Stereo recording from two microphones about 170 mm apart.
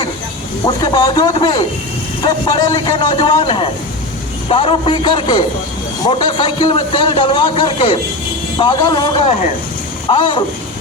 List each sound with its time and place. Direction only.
0.6 s a man's voice: 25° left (ahead or behind)